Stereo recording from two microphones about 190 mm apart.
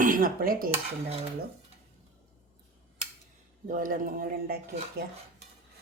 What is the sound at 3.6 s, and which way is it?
Speech, 45° right (ahead or behind).